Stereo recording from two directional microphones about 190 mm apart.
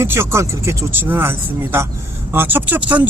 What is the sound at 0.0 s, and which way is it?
Speech, 15° right (ahead or behind).